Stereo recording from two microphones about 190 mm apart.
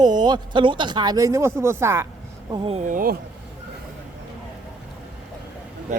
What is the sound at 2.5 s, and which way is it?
Speech, 30° right (ahead or behind).